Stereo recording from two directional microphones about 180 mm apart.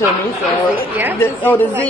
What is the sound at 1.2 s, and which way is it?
Speech, 10° left (ahead or behind).